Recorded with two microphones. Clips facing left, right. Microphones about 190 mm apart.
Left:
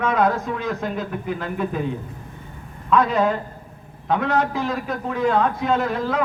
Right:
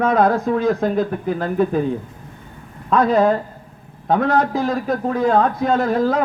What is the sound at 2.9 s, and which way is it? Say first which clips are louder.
A man's voice: right 4 dB; 40° right (ahead or behind).